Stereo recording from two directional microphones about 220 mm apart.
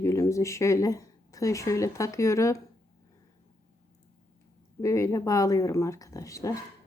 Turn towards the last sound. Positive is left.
turn(degrees=15)  # may be behind; listen again after turning